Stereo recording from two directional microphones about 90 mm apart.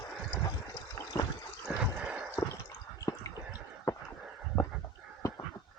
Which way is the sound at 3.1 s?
40° left (ahead or behind).